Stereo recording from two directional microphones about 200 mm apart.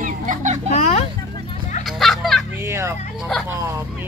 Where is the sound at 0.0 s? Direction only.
40° right (ahead or behind).